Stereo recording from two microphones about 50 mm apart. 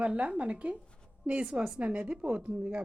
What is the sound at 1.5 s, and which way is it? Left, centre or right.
Speech, centre.